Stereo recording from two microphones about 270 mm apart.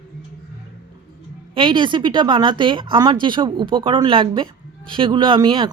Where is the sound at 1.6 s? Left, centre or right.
Centre.